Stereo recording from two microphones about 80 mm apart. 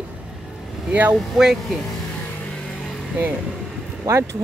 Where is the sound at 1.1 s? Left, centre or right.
Centre.